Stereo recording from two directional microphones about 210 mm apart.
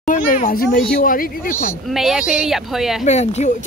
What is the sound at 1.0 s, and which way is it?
Speech, 40° left (ahead or behind).